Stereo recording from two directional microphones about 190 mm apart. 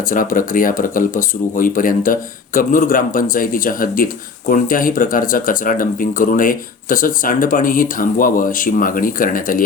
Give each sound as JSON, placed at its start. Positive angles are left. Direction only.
{"t": 0.1, "sound": "speech", "side_deg": 45}